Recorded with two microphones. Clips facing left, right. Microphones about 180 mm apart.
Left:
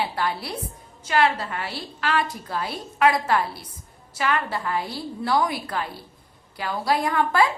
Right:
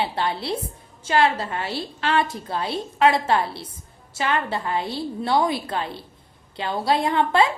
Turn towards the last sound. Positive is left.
turn(degrees=-25)  # may be behind; listen again after turning